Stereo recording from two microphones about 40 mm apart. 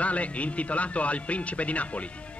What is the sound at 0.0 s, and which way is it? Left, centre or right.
Speech, left.